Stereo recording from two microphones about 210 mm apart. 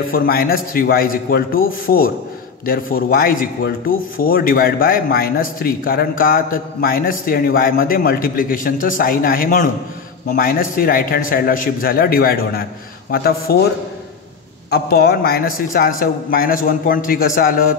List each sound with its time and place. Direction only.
0.1 s speech: 45° left (ahead or behind)
14.7 s speech: 50° left (ahead or behind)